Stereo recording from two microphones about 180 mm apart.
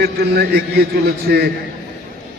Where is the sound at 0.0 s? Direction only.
60° right (ahead or behind).